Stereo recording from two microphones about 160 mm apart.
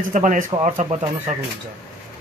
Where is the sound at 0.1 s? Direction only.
55° right (ahead or behind).